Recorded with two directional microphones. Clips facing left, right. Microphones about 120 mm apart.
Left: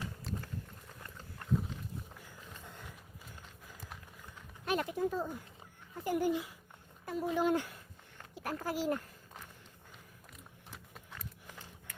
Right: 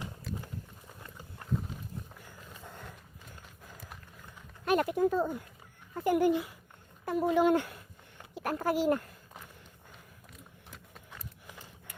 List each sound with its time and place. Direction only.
1.0 s horse: 5° right (ahead or behind)
4.6 s speech: 60° right (ahead or behind)
10.7 s a sound: centre (ahead or behind)